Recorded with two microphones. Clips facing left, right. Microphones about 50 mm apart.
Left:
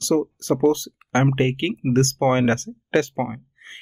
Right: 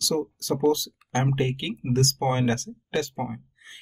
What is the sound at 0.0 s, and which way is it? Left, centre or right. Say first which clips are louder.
Speech: left 6 dB; left.